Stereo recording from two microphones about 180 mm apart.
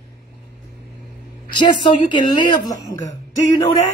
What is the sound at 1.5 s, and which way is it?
A man's voice, 25° left (ahead or behind).